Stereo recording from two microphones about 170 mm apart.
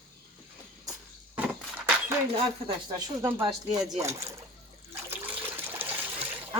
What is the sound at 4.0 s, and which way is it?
Speech, 15° right (ahead or behind).